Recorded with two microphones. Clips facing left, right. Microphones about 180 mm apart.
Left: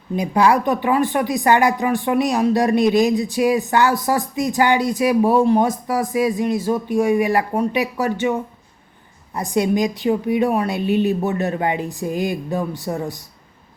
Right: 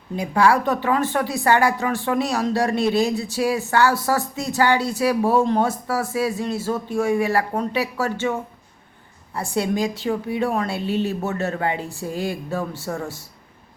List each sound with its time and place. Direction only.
0.2 s a woman's voice: 20° left (ahead or behind)